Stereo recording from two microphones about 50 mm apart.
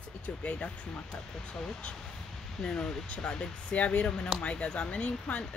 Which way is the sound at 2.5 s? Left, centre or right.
Centre.